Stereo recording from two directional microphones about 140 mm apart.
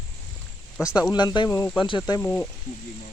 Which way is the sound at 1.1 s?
30° left (ahead or behind).